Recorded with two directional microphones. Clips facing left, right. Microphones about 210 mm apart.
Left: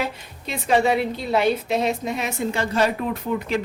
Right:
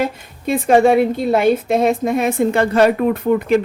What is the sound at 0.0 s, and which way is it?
Speech, 50° right (ahead or behind).